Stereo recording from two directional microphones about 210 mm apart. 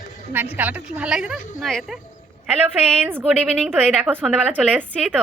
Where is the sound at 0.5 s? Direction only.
10° right (ahead or behind).